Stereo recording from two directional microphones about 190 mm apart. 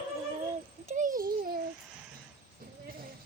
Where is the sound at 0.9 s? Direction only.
40° right (ahead or behind).